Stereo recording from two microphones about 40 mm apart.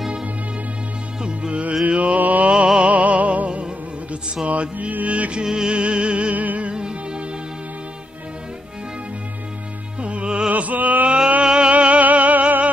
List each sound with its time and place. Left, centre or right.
1.2 s music: right
2.1 s mantra: right
2.5 s music: right
2.9 s music: right
5.4 s music: centre
6.3 s music: right
6.7 s music: right
9.9 s music: right
10.5 s a sound: right
11.1 s a sound: right
11.4 s music: right
11.7 s music: right